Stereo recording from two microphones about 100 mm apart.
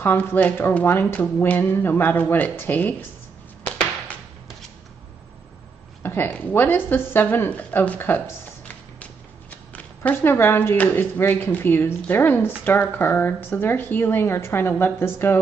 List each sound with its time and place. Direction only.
0.0 s speech: 20° left (ahead or behind)
6.0 s speech: 20° left (ahead or behind)
8.6 s a sound: 15° left (ahead or behind)
10.3 s speech: 25° left (ahead or behind)